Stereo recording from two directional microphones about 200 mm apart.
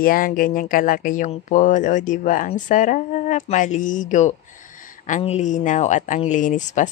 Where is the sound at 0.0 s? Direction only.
45° left (ahead or behind).